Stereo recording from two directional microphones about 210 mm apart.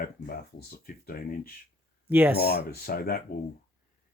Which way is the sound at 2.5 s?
45° left (ahead or behind).